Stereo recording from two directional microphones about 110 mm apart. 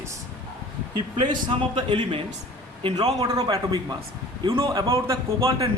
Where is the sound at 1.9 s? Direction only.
50° right (ahead or behind).